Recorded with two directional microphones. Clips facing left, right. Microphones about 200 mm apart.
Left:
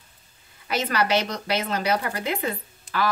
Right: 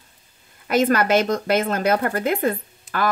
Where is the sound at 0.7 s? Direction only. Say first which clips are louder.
Right 6 dB; 50° right (ahead or behind).